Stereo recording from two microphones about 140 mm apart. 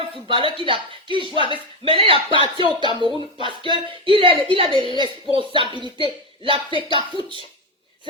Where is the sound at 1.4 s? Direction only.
35° left (ahead or behind).